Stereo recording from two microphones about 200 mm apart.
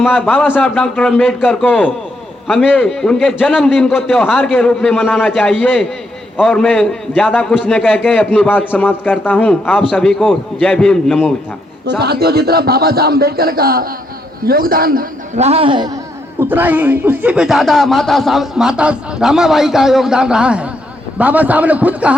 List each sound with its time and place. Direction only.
0.0 s a man's voice: 5° left (ahead or behind)
11.9 s speech: 50° right (ahead or behind)
15.4 s a man's voice: 30° right (ahead or behind)
16.4 s a man's voice: 10° right (ahead or behind)